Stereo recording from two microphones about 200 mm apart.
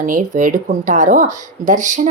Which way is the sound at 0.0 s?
40° right (ahead or behind).